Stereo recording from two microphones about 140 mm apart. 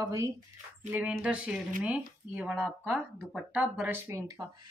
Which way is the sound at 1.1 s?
5° right (ahead or behind).